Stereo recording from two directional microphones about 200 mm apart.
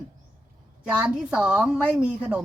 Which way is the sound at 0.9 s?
5° right (ahead or behind).